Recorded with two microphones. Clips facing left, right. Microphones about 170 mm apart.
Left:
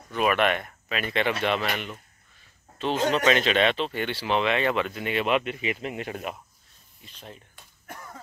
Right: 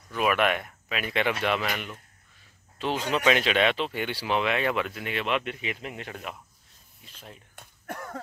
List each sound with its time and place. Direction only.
0.1 s speech: 5° right (ahead or behind)
3.3 s speech: 10° right (ahead or behind)
7.5 s slap: 60° right (ahead or behind)